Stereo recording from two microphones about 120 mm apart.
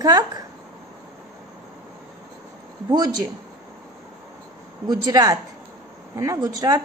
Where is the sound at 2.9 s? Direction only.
35° right (ahead or behind).